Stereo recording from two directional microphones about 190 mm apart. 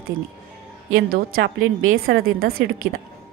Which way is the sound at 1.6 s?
90° right.